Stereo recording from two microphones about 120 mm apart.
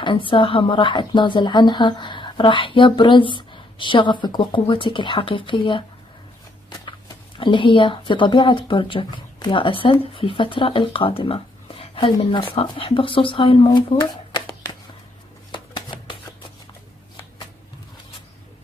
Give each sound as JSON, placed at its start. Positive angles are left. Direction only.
{"t": 0.0, "sound": "a woman's voice", "side_deg": 45}
{"t": 13.9, "sound": "shuffling cards", "side_deg": 35}